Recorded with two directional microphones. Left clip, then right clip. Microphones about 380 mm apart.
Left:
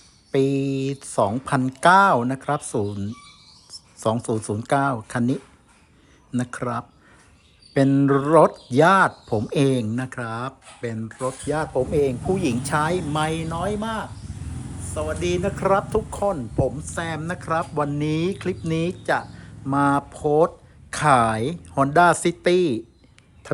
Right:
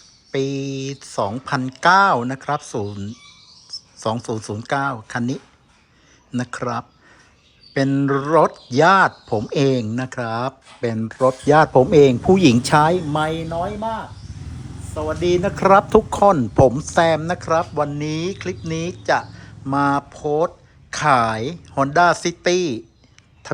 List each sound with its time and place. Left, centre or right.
0.3 s speech: centre
15.0 s speech: centre
16.8 s speech: centre